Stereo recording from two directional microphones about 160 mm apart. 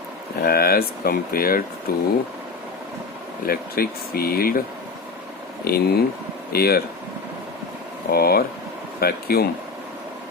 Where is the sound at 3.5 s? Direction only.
70° left (ahead or behind).